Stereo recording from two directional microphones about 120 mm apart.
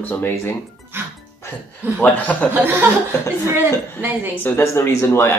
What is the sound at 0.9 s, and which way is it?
Music, 15° right (ahead or behind).